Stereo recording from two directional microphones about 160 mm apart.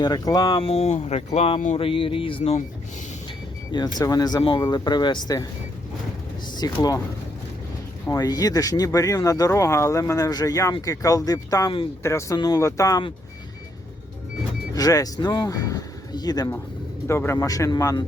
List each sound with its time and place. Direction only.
0.0 s speech: 25° left (ahead or behind); by 2.6 s 40° left (ahead or behind)
3.7 s speech: 25° left (ahead or behind)
6.6 s speech: 25° left (ahead or behind)
8.0 s speech: 20° left (ahead or behind)
14.7 s speech: 20° left (ahead or behind)